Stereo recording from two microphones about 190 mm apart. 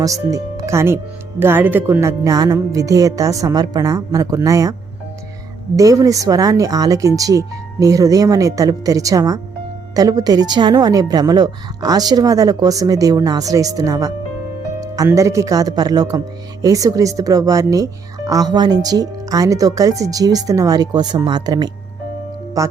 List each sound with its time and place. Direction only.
0.0 s speech: 15° right (ahead or behind)
5.7 s a woman's voice: 15° right (ahead or behind)